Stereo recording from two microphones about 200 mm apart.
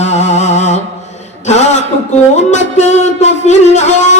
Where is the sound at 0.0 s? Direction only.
35° left (ahead or behind).